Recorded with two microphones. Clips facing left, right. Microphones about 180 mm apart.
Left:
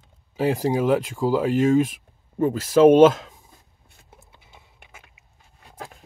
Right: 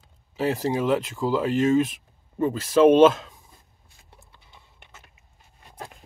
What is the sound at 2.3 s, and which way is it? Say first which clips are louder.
Speech: left 2 dB; 50° left (ahead or behind).